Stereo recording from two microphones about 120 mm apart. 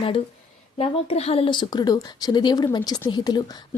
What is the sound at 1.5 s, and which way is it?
A woman's voice, 40° left (ahead or behind).